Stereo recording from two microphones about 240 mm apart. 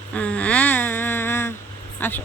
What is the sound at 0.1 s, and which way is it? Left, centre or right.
Humming, centre.